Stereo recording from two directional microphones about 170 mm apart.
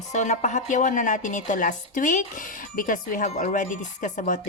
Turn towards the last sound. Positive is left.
turn(degrees=45)  # may be behind; listen again after turning